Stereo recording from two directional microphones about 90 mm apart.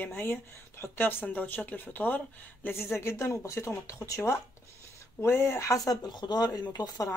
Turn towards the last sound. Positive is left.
turn(degrees=50)  # may be behind; listen again after turning